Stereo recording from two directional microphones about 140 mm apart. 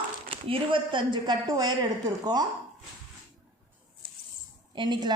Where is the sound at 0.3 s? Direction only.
40° right (ahead or behind).